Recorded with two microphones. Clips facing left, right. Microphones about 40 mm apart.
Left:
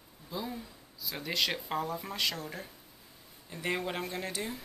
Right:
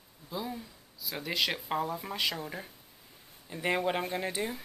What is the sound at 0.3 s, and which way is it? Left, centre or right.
A woman's voice, centre.